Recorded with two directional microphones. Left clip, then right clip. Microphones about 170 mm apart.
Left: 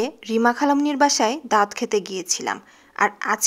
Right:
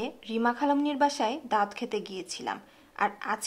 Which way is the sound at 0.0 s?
35° left (ahead or behind).